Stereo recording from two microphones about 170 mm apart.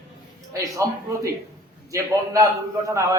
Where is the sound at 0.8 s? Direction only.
20° right (ahead or behind).